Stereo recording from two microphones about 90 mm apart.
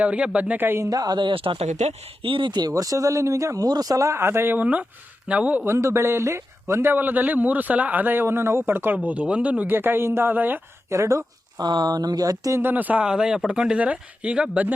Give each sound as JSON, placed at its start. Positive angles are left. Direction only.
{"t": 0.0, "sound": "speech", "side_deg": -15}
{"t": 0.9, "sound": "speech", "side_deg": -45}
{"t": 1.2, "sound": "speech", "side_deg": -75}
{"t": 5.6, "sound": "a man's voice", "side_deg": -30}
{"t": 9.0, "sound": "a man's voice", "side_deg": -15}
{"t": 10.9, "sound": "speech", "side_deg": -35}
{"t": 11.5, "sound": "speech", "side_deg": -55}
{"t": 12.5, "sound": "speech", "side_deg": -20}